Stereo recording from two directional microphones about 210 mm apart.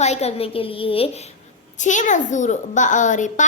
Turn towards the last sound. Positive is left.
turn(degrees=35)  # may be behind; listen again after turning